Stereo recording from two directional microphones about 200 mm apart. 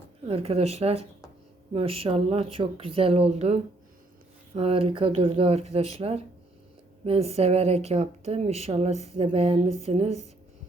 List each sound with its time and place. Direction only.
0.3 s speech: 30° right (ahead or behind)